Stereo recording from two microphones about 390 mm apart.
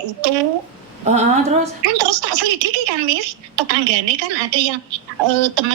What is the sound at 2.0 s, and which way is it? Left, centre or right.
A woman's voice, right.